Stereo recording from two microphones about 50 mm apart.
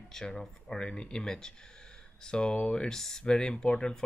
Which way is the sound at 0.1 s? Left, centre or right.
Centre.